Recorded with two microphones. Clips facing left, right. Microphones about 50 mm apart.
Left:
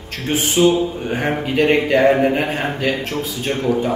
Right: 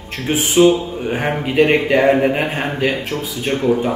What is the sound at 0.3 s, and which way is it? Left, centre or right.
A man's voice, centre.